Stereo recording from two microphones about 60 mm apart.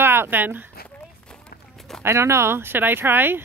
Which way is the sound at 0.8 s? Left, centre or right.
Centre.